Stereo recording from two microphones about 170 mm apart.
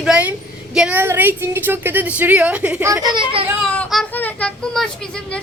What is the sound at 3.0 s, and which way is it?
Speech, 30° right (ahead or behind).